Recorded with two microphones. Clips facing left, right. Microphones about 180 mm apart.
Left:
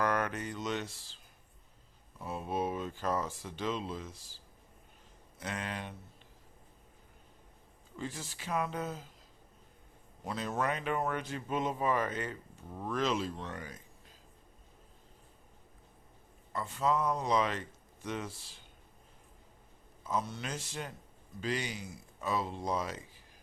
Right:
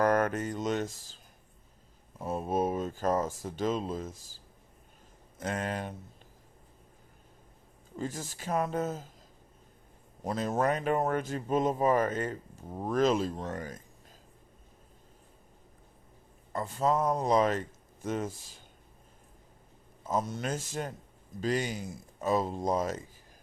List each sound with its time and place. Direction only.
0.0 s mantra: 45° right (ahead or behind)
2.1 s speech: 45° right (ahead or behind)
5.4 s speech: 45° right (ahead or behind)
7.9 s speech: 45° right (ahead or behind)
10.2 s speech: 45° right (ahead or behind)
16.5 s speech: 45° right (ahead or behind)
20.1 s speech: 45° right (ahead or behind)